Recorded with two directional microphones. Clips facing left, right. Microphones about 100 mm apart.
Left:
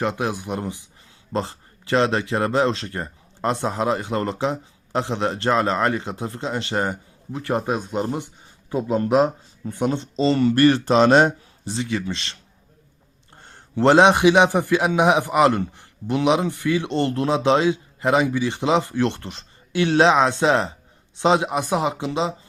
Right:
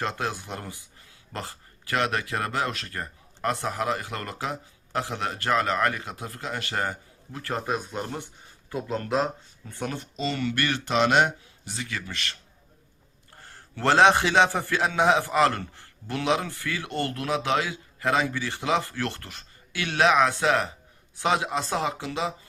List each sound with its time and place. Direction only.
0.0 s a man's voice: 15° left (ahead or behind)
8.7 s a man's voice: 20° left (ahead or behind)